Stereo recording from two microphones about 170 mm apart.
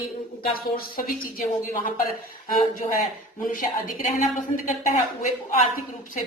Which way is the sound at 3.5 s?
50° left (ahead or behind).